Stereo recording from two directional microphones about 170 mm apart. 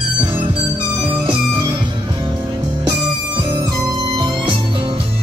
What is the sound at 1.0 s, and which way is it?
Music, 25° right (ahead or behind).